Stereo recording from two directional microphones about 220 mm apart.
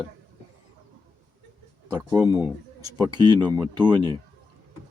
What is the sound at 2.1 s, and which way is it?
Speech, 15° right (ahead or behind).